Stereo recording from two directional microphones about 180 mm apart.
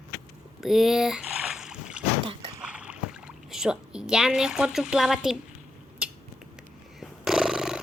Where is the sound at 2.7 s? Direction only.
5° right (ahead or behind).